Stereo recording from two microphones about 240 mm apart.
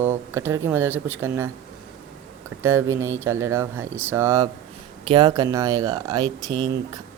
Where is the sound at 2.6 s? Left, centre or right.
Centre.